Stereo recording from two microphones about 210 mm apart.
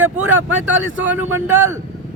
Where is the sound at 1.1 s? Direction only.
10° right (ahead or behind).